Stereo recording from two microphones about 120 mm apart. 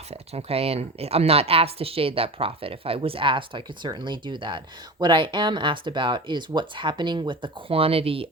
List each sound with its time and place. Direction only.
0.1 s speech: 60° right (ahead or behind)